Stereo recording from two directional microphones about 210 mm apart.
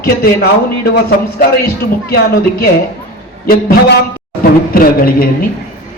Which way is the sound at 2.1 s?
50° left (ahead or behind).